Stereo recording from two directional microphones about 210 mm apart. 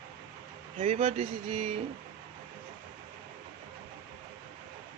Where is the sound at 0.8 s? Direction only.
30° right (ahead or behind).